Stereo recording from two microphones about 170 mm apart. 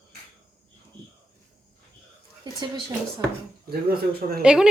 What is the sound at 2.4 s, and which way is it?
Speech, 25° right (ahead or behind).